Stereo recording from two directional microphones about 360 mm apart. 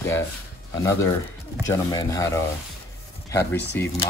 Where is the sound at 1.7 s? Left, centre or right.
Centre.